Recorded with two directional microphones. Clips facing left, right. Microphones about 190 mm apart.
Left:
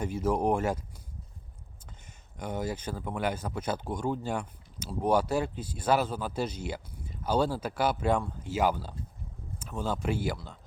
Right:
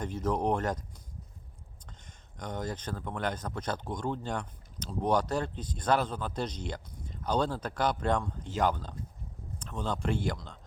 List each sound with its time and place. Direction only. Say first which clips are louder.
0.0 s speech: left 2 dB; 10° left (ahead or behind)
2.4 s speech: left 3 dB; 10° left (ahead or behind)